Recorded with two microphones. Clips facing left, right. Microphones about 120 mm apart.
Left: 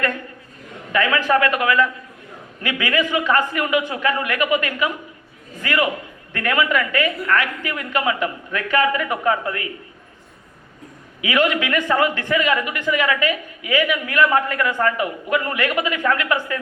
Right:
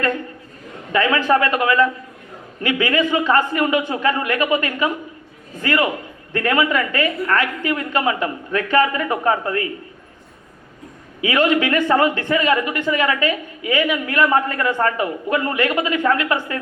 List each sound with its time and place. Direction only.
0.9 s a man's voice: 30° right (ahead or behind)
11.2 s a man's voice: 30° right (ahead or behind)